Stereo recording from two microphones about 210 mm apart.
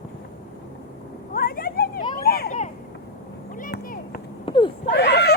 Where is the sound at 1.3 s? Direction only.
45° left (ahead or behind).